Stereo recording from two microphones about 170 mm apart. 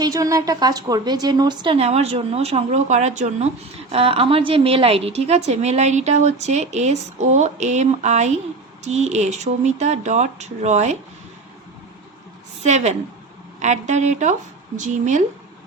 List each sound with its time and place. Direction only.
0.0 s a woman's voice: 20° right (ahead or behind); by 10.9 s 40° right (ahead or behind)
12.6 s speech: 40° right (ahead or behind)